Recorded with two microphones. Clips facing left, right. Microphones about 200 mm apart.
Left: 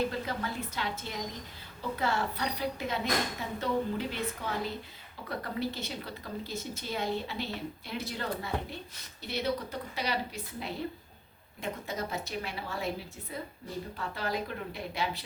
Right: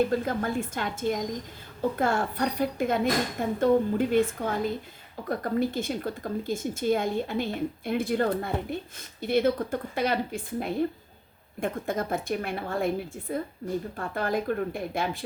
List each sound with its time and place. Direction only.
0.1 s speech: 50° right (ahead or behind)